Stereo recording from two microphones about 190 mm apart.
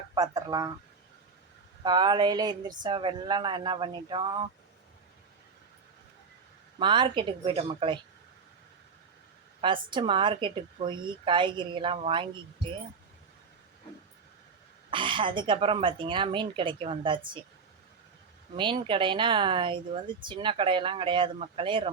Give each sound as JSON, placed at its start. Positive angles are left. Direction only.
{"t": 0.1, "sound": "speech", "side_deg": -20}
{"t": 1.8, "sound": "speech", "side_deg": -20}
{"t": 6.7, "sound": "speech", "side_deg": -25}
{"t": 9.6, "sound": "speech", "side_deg": -25}
{"t": 14.8, "sound": "speech", "side_deg": -25}
{"t": 18.5, "sound": "speech", "side_deg": -25}